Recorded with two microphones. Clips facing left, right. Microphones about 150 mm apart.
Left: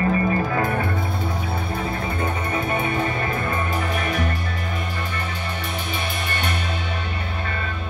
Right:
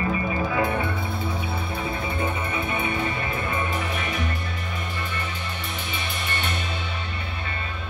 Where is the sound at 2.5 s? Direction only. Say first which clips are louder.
Left 4 dB; 40° left (ahead or behind).